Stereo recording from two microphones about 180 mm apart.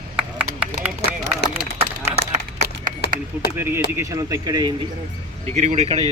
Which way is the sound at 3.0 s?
65° left (ahead or behind).